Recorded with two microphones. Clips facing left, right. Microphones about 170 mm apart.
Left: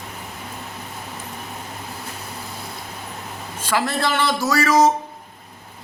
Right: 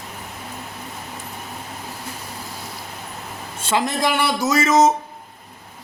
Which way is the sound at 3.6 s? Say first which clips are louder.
Right 1 dB; 20° right (ahead or behind).